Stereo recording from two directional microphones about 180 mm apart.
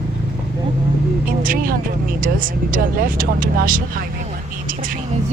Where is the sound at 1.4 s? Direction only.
50° right (ahead or behind).